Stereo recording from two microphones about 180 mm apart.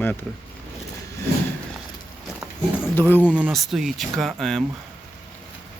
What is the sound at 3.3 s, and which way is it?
Speech, 5° right (ahead or behind).